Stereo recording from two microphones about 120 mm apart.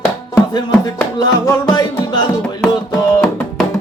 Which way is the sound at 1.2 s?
35° left (ahead or behind).